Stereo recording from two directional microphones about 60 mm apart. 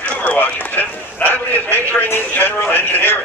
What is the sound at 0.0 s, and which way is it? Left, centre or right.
A man's voice, left.